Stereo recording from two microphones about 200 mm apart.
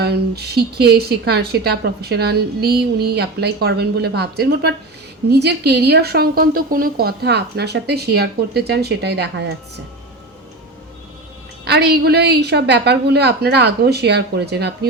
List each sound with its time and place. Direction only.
0.0 s a woman's voice: 55° right (ahead or behind)
11.6 s a woman's voice: 55° right (ahead or behind)